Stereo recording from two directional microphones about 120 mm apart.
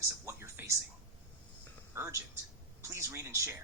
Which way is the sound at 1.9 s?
25° right (ahead or behind).